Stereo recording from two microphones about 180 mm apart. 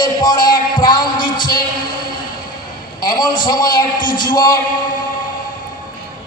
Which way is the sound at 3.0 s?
25° left (ahead or behind).